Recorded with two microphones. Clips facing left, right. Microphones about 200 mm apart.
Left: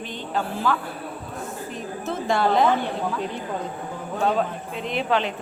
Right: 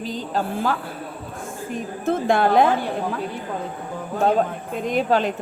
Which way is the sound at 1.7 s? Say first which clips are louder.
Right 8 dB; 55° right (ahead or behind).